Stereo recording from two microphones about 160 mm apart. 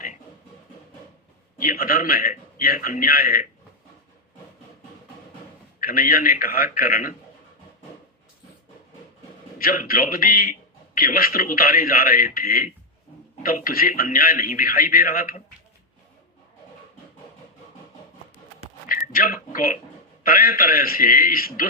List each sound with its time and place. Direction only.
1.5 s a man's voice: 60° left (ahead or behind)
5.8 s a man's voice: 60° left (ahead or behind)
9.6 s a man's voice: 65° left (ahead or behind)
18.9 s a sound: 60° left (ahead or behind)
20.2 s a man's voice: 65° left (ahead or behind)